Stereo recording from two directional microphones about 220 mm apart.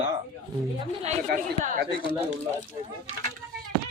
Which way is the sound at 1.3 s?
40° right (ahead or behind).